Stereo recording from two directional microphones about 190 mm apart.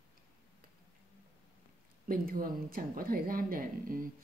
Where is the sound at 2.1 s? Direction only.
50° right (ahead or behind).